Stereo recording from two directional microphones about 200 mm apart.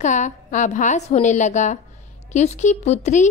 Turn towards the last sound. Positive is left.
turn(degrees=35)  # may be behind; listen again after turning